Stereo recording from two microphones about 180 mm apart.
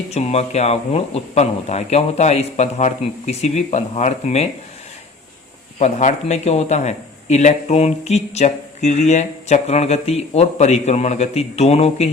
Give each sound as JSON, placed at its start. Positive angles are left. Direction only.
{"t": 0.1, "sound": "a man's voice", "side_deg": 35}
{"t": 5.8, "sound": "a man's voice", "side_deg": 40}